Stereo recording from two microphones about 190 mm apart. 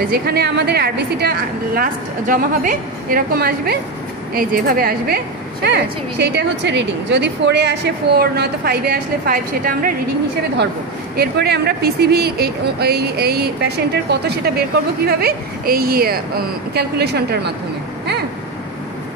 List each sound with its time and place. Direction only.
0.1 s a woman's voice: 60° right (ahead or behind)
11.1 s speech: 60° right (ahead or behind)